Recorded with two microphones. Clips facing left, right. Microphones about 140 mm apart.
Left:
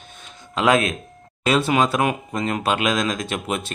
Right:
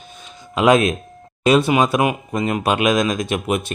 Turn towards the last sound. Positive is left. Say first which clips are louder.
# right 5 dB
turn(degrees=-15)  # may be behind; listen again after turning